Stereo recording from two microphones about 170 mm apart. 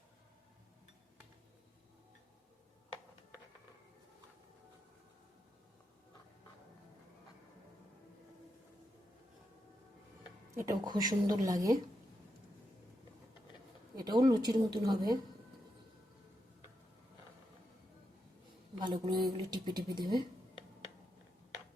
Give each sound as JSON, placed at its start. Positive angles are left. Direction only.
{"t": 10.7, "sound": "a woman's voice", "side_deg": -25}
{"t": 13.9, "sound": "a sound", "side_deg": -25}
{"t": 18.8, "sound": "a woman's voice", "side_deg": -25}